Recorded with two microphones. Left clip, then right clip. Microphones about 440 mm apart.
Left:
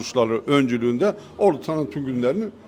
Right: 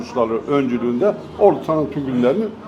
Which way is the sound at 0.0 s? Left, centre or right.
Left.